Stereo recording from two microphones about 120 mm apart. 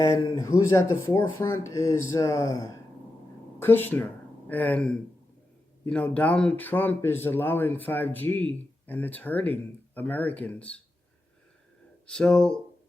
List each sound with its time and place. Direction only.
0.0 s speech: 25° left (ahead or behind)
3.6 s speech: 15° left (ahead or behind)
12.0 s speech: 5° left (ahead or behind)